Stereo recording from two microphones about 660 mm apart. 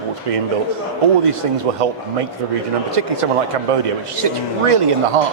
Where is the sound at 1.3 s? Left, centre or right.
Right.